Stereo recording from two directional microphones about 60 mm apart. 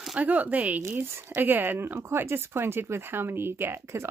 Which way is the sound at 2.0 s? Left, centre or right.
Right.